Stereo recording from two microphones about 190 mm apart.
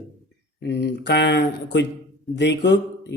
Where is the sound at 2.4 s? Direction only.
65° left (ahead or behind).